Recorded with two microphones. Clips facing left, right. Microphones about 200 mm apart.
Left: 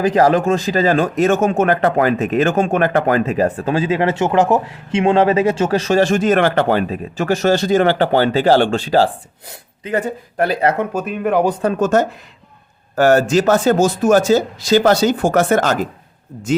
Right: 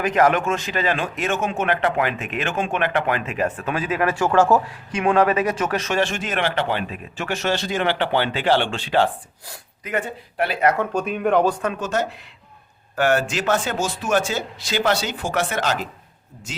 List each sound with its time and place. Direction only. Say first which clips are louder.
0.0 s speech: left 5 dB; 35° left (ahead or behind)
10.9 s speech: left 2 dB; centre (ahead or behind)
11.6 s speech: left 8 dB; 45° left (ahead or behind)